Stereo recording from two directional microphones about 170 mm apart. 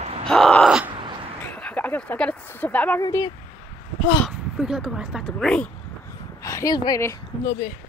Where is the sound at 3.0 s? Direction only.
20° left (ahead or behind).